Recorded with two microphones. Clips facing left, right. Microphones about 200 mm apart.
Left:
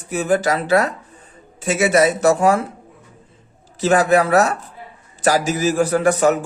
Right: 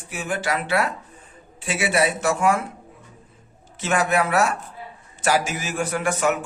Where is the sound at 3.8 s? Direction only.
35° left (ahead or behind).